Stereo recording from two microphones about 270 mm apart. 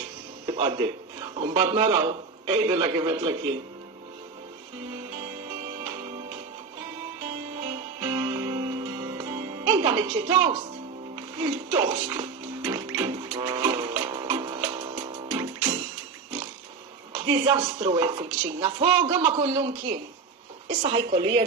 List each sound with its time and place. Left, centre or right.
0.5 s a woman's voice: centre
8.0 s music: centre
11.3 s a woman's voice: centre
12.6 s music: centre
17.1 s a woman's voice: centre